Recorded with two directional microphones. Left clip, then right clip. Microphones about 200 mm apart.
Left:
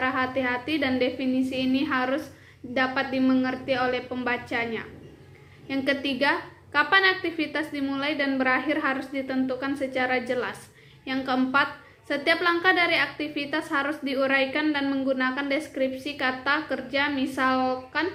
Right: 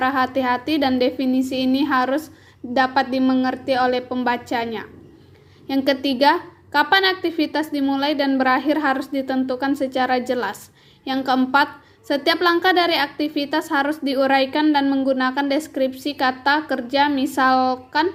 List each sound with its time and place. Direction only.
0.0 s a woman's voice: 45° right (ahead or behind)